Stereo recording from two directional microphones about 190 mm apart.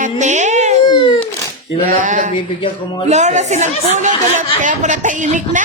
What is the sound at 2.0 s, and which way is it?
A woman's voice, 40° right (ahead or behind).